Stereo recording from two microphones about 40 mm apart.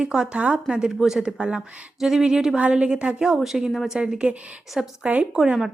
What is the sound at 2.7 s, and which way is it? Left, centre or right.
Speech, right.